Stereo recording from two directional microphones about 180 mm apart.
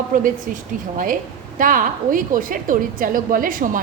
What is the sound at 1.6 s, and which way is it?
A woman's voice, 50° right (ahead or behind).